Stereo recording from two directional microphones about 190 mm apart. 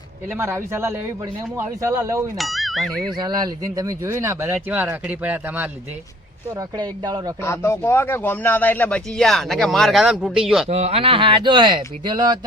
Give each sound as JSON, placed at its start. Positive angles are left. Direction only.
{"t": 0.3, "sound": "speech", "side_deg": -15}
{"t": 2.4, "sound": "speech", "side_deg": 0}
{"t": 3.2, "sound": "speech", "side_deg": -20}
{"t": 6.6, "sound": "speech", "side_deg": -20}
{"t": 7.4, "sound": "speech", "side_deg": 15}
{"t": 10.7, "sound": "speech", "side_deg": -35}